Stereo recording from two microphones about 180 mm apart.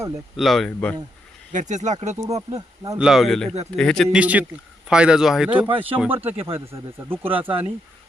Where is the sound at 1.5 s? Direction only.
40° right (ahead or behind).